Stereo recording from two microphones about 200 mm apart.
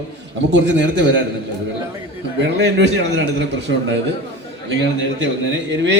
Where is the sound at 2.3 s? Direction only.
60° right (ahead or behind).